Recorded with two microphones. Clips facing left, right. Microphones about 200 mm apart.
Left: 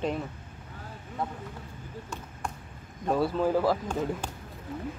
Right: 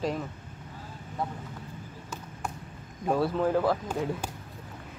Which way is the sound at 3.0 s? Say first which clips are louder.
Even; centre (ahead or behind).